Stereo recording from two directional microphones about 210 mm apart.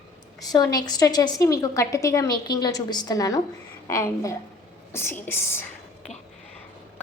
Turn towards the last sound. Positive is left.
turn(degrees=10)  # may be behind; listen again after turning